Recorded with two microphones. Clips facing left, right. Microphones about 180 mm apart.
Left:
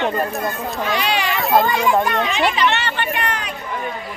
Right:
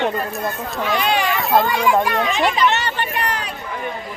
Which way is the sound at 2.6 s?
40° right (ahead or behind).